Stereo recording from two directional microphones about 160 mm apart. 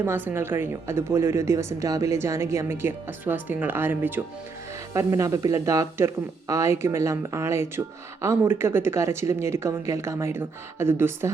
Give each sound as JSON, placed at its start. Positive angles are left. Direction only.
{"t": 0.0, "sound": "a woman's voice", "side_deg": -15}